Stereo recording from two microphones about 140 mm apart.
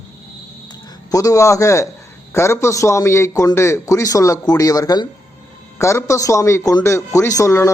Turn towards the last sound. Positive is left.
turn(degrees=20)  # may be behind; listen again after turning